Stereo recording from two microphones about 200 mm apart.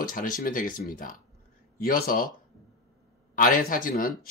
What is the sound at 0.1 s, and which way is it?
Speech, 45° left (ahead or behind).